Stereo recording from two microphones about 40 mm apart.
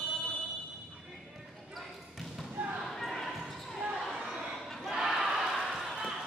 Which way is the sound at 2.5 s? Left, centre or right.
Right.